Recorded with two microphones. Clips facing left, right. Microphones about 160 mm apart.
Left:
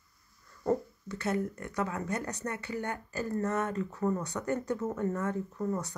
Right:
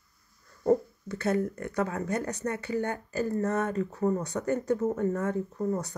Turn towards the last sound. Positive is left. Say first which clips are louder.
# right 3 dB
turn(degrees=-40)  # may be behind; listen again after turning